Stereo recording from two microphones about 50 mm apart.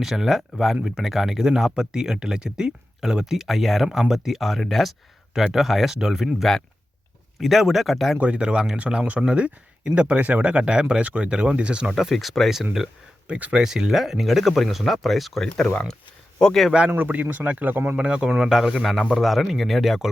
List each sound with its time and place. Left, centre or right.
0.0 s speech: centre
4.1 s speech: centre
8.2 s speech: right
11.9 s speech: centre
13.2 s speech: right
13.6 s speech: centre
16.9 s a man's voice: right
17.9 s speech: right
18.3 s speech: centre